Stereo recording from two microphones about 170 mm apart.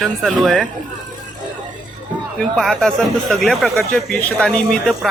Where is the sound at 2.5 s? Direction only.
5° left (ahead or behind).